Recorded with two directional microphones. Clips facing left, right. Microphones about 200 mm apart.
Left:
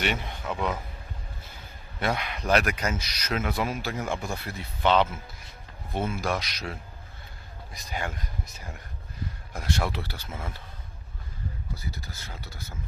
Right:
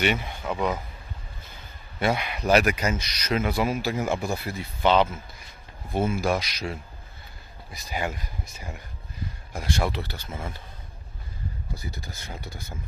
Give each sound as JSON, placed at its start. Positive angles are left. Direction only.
{"t": 0.0, "sound": "speech", "side_deg": -5}
{"t": 2.0, "sound": "speech", "side_deg": -5}
{"t": 11.8, "sound": "speech", "side_deg": -15}